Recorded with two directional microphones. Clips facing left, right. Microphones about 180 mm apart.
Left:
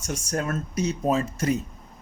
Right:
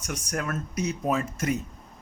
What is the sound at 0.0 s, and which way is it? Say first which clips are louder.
Speech: left 3 dB; 30° left (ahead or behind).